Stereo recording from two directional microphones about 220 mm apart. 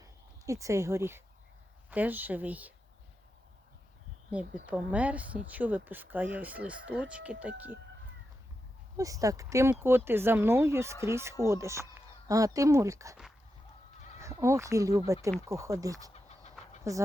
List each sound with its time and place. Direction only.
0.0 s speech: 15° right (ahead or behind)
4.6 s speech: 5° right (ahead or behind)
9.0 s speech: 15° right (ahead or behind)
14.2 s speech: 15° right (ahead or behind)
16.1 s a sound: 30° left (ahead or behind)